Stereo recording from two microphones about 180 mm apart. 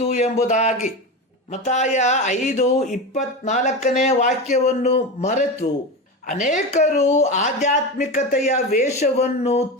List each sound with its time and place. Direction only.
0.0 s speech: 35° left (ahead or behind)